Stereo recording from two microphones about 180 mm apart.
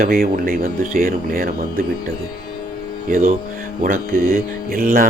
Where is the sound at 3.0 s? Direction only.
50° right (ahead or behind).